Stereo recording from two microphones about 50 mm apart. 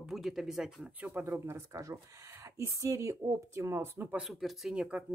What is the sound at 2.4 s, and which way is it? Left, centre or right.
Speech, right.